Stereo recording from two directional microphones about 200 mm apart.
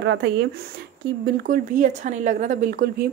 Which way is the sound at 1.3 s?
45° right (ahead or behind).